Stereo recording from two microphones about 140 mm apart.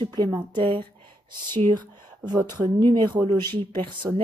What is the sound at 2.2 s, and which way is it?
A woman's voice, 30° right (ahead or behind).